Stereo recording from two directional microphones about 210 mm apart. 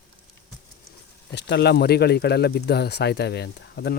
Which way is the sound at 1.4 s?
55° left (ahead or behind).